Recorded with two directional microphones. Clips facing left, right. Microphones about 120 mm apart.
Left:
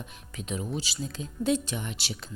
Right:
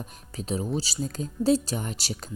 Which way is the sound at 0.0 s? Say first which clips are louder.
Right 3 dB; 35° right (ahead or behind).